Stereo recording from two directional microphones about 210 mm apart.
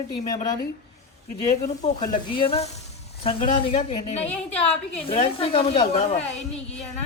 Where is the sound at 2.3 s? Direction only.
25° left (ahead or behind).